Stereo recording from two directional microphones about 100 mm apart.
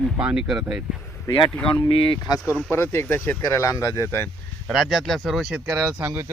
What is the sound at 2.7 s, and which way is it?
Speech, 25° left (ahead or behind).